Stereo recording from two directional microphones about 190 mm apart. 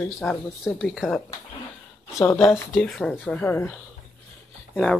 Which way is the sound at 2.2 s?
15° left (ahead or behind).